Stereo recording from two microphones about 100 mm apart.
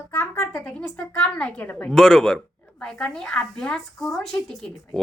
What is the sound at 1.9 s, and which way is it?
A woman's voice, 5° left (ahead or behind).